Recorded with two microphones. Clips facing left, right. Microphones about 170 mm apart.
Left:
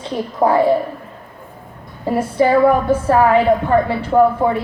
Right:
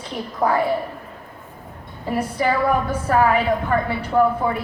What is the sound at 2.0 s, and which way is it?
A woman's voice, 25° left (ahead or behind).